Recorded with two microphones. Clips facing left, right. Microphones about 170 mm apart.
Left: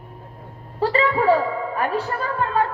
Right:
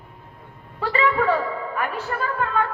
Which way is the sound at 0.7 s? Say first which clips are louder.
Left 2 dB; 35° left (ahead or behind).